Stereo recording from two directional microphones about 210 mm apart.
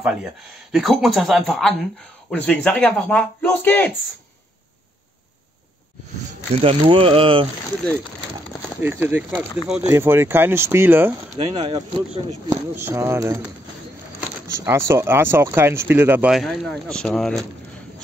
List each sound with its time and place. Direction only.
0.0 s speech: 5° right (ahead or behind)
6.5 s speech: 25° right (ahead or behind)
8.8 s speech: 10° right (ahead or behind)
11.3 s speech: 20° right (ahead or behind)
14.6 s speech: 15° right (ahead or behind)